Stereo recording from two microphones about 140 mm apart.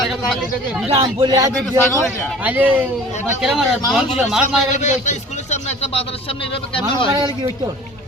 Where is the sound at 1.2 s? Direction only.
25° right (ahead or behind).